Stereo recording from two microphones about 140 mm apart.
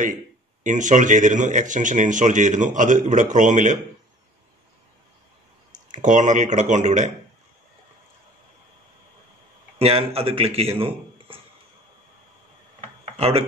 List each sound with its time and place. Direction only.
0.7 s speech: 60° right (ahead or behind)
5.7 s speech: 65° right (ahead or behind)
9.8 s speech: 45° right (ahead or behind)
13.2 s speech: 45° right (ahead or behind)